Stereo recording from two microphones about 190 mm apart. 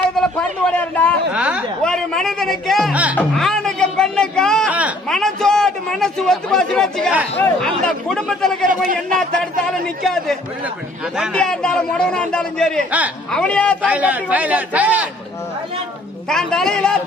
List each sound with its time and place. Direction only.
0.2 s a man's voice: 5° left (ahead or behind)
1.3 s a man's voice: 5° right (ahead or behind)
4.7 s a man's voice: 5° right (ahead or behind)
8.9 s speech: 45° right (ahead or behind)
9.4 s a man's voice: 5° left (ahead or behind)
13.8 s a man's voice: 10° right (ahead or behind)
16.3 s a man's voice: centre (ahead or behind)